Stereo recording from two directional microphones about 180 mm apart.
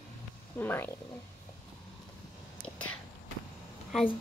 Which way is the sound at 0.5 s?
10° left (ahead or behind).